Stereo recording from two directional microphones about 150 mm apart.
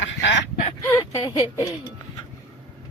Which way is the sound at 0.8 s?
20° left (ahead or behind).